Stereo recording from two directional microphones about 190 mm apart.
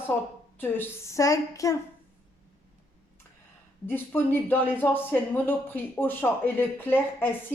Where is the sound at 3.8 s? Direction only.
10° left (ahead or behind).